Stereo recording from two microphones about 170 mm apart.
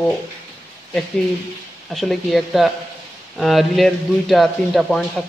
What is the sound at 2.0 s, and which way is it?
Speech, centre (ahead or behind).